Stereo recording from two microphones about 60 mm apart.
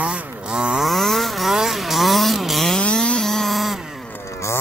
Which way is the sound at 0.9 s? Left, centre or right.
Centre.